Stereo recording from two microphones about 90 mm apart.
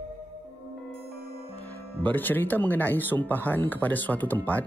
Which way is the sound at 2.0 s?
20° left (ahead or behind).